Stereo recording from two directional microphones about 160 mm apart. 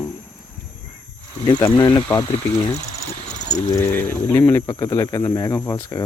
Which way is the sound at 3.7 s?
15° left (ahead or behind).